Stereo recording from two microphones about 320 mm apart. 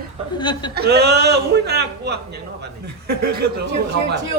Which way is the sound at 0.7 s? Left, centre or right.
Right.